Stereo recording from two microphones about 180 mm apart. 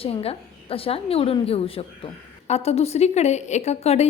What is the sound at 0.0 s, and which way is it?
A woman's voice, 30° left (ahead or behind).